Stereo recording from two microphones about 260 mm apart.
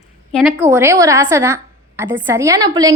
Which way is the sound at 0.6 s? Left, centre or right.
Centre.